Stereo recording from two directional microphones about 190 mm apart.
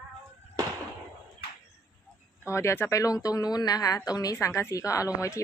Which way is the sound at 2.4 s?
15° left (ahead or behind).